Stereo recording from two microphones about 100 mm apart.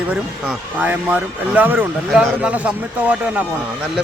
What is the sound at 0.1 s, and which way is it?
Speech, 10° right (ahead or behind).